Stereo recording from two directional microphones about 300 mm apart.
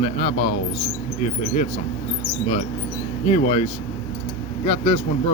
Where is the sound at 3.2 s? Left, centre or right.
Left.